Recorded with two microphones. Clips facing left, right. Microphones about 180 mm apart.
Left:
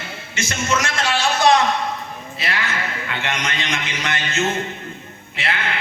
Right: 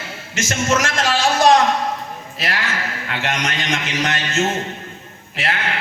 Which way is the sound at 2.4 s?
45° right (ahead or behind).